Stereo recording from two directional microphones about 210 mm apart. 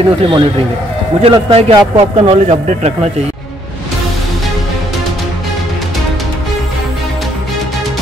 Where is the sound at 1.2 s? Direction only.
30° right (ahead or behind).